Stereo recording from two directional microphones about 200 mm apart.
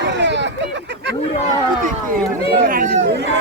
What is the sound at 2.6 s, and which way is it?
Chatter, 45° right (ahead or behind).